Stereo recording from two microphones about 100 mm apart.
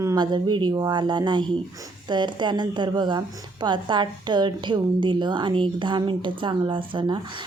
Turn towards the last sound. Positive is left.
turn(degrees=-55)  # may be behind; listen again after turning